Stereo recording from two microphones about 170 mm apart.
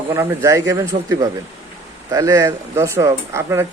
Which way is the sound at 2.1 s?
20° right (ahead or behind).